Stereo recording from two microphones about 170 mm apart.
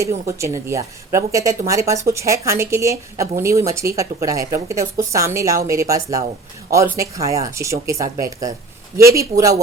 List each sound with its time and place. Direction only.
0.0 s speech: 15° right (ahead or behind)